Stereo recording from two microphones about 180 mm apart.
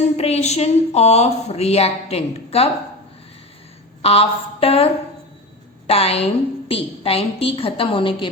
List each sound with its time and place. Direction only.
0.2 s a woman's voice: 35° left (ahead or behind)
4.0 s a woman's voice: 35° left (ahead or behind)
5.9 s a woman's voice: 35° left (ahead or behind)